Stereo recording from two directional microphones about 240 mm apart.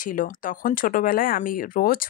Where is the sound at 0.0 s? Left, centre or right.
Left.